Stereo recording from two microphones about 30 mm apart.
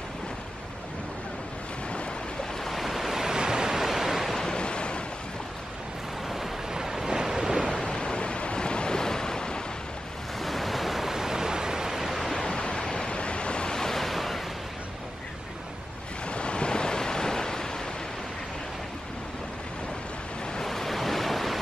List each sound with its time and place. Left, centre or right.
2.7 s waves: centre
3.3 s waves: right
3.8 s waves: centre
4.6 s waves: left
6.2 s waves: centre
7.7 s waves: left
10.4 s waves: centre
12.0 s waves: centre
12.3 s waves: left
13.7 s waves: centre
16.3 s waves: left; by 17.6 s centre
20.6 s waves: centre